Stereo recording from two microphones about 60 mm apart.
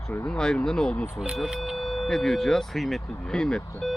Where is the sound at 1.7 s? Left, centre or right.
Centre.